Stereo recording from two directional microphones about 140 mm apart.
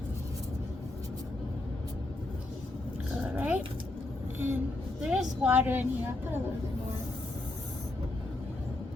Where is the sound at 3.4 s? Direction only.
10° right (ahead or behind).